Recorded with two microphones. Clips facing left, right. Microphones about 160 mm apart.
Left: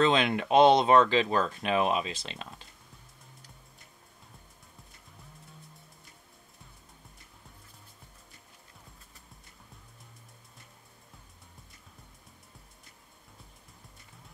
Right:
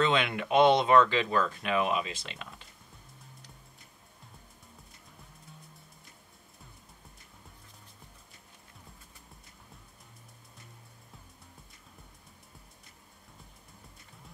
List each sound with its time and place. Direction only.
0.0 s speech: 30° left (ahead or behind)